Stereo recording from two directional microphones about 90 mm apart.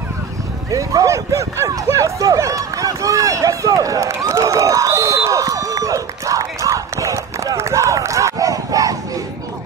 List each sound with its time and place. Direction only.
0.7 s speech: 35° right (ahead or behind)